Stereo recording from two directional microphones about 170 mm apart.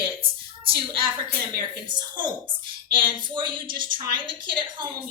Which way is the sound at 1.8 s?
25° right (ahead or behind).